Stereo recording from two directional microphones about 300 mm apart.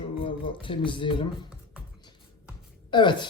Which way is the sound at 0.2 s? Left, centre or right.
Centre.